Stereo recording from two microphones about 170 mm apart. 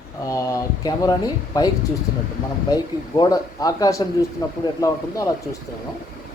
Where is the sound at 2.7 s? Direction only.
20° left (ahead or behind).